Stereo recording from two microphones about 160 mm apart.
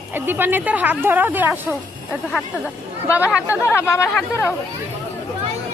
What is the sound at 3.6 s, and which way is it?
Speech, 15° left (ahead or behind).